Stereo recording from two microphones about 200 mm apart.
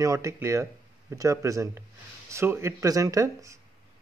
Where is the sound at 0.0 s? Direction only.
15° right (ahead or behind).